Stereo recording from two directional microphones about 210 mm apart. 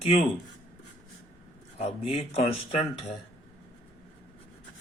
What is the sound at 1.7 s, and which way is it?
Speech, 30° left (ahead or behind).